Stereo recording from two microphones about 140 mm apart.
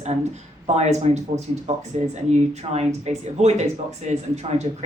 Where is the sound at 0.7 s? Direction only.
55° right (ahead or behind).